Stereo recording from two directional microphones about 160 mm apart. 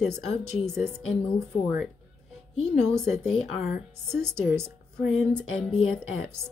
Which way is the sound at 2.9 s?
5° left (ahead or behind).